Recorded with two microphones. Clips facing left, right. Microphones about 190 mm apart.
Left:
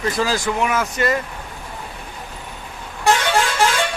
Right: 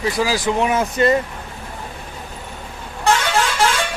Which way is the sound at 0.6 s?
30° right (ahead or behind).